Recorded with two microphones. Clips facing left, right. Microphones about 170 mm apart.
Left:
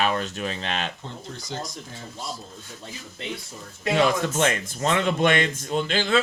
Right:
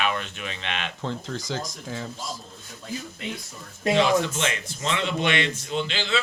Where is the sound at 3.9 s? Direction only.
50° left (ahead or behind).